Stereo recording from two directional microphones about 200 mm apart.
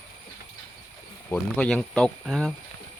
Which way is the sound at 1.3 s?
5° left (ahead or behind).